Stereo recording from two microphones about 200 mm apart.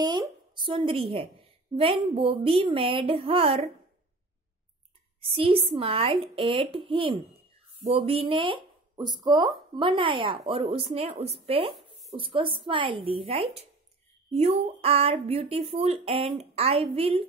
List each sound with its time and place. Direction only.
0.0 s speech: 20° right (ahead or behind)
5.2 s speech: 25° right (ahead or behind)